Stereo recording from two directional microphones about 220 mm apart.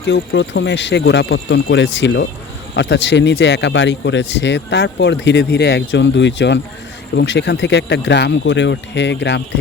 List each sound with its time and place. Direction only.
0.1 s speech: 55° left (ahead or behind)